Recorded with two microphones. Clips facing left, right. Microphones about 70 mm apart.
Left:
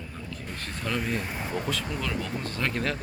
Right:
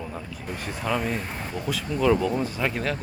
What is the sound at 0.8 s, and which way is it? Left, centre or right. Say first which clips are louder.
Speech: right 3 dB; centre.